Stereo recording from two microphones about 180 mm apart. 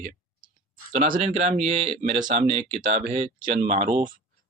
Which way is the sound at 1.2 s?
35° right (ahead or behind).